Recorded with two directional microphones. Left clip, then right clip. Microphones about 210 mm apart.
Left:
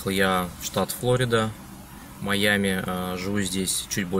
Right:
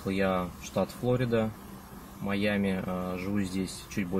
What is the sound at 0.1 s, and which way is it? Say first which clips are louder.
Speech: left 6 dB; 10° left (ahead or behind).